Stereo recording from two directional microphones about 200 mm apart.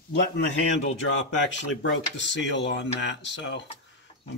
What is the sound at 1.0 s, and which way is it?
Speech, 75° left (ahead or behind).